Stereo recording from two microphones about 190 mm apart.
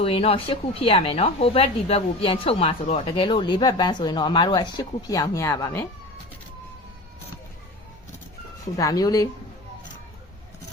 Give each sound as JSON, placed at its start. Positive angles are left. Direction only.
{"t": 0.0, "sound": "speech", "side_deg": 30}
{"t": 8.7, "sound": "speech", "side_deg": 20}